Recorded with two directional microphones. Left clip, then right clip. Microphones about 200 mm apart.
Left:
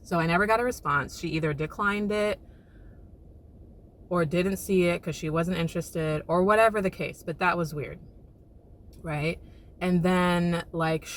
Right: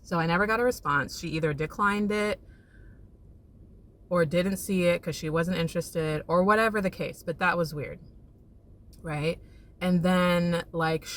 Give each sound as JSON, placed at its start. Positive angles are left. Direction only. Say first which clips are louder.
{"t": 0.1, "sound": "speech", "louder": "left 2 dB", "side_deg": -10}
{"t": 4.1, "sound": "speech", "louder": "right 1 dB", "side_deg": -15}
{"t": 9.0, "sound": "speech", "louder": "even", "side_deg": -15}